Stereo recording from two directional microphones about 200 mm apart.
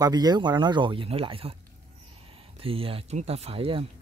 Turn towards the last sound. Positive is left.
turn(degrees=-30)  # may be behind; listen again after turning